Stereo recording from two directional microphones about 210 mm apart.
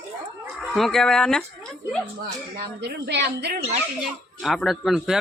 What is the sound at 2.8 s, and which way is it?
Speech, 50° right (ahead or behind).